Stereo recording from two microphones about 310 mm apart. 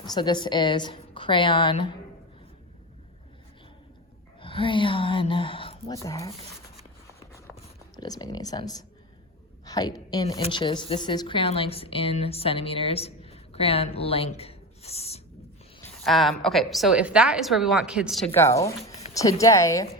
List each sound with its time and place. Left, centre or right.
0.0 s a woman's voice: centre
4.4 s speech: centre
7.9 s a woman's voice: centre
15.8 s a woman's voice: centre
18.3 s a woman's voice: centre